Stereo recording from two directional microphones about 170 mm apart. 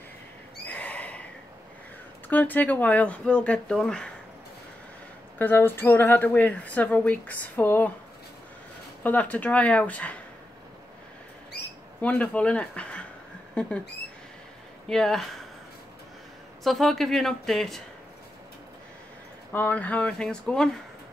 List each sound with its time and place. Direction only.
0.7 s neigh: 10° left (ahead or behind)
2.2 s a woman's voice: 10° left (ahead or behind)
5.4 s a woman's voice: 10° left (ahead or behind)
9.0 s a woman's voice: 10° left (ahead or behind)
12.0 s a woman's voice: 10° left (ahead or behind)
14.9 s speech: 5° left (ahead or behind)
16.6 s speech: centre (ahead or behind)
19.5 s a woman's voice: 10° left (ahead or behind)